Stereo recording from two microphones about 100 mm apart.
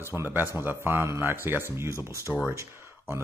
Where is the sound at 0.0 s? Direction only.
25° right (ahead or behind).